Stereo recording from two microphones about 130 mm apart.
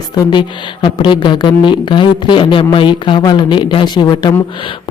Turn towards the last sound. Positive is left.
turn(degrees=35)  # may be behind; listen again after turning